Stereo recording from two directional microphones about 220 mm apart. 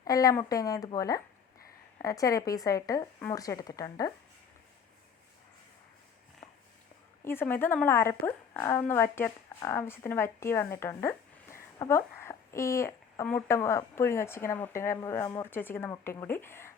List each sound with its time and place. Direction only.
0.0 s a woman's voice: 15° left (ahead or behind)
7.3 s a woman's voice: 10° left (ahead or behind)